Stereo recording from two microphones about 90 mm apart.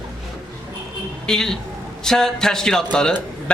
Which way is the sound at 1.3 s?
5° left (ahead or behind).